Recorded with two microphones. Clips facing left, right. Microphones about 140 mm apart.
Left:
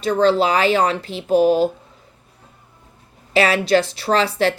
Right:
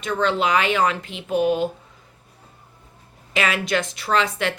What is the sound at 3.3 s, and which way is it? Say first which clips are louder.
Speech: left 7 dB; 35° left (ahead or behind).